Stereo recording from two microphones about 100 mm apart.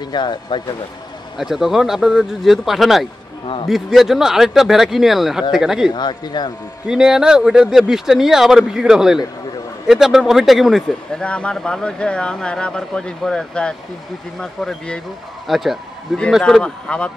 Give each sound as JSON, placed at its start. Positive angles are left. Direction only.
{"t": 0.1, "sound": "a man's voice", "side_deg": 50}
{"t": 1.4, "sound": "speech", "side_deg": -5}
{"t": 5.9, "sound": "a man's voice", "side_deg": 45}
{"t": 6.9, "sound": "speech", "side_deg": -5}
{"t": 11.2, "sound": "speech", "side_deg": 10}
{"t": 16.6, "sound": "speech", "side_deg": 10}